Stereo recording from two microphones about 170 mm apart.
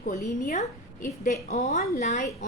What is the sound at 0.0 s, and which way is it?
A woman's voice, 50° left (ahead or behind).